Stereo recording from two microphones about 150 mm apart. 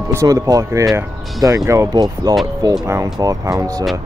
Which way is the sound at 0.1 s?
20° right (ahead or behind).